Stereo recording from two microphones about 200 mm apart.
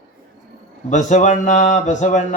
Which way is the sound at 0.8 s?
35° left (ahead or behind).